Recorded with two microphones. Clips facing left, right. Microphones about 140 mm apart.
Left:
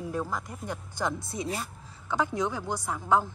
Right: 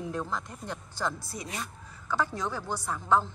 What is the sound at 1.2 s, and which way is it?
A woman's voice, 25° left (ahead or behind).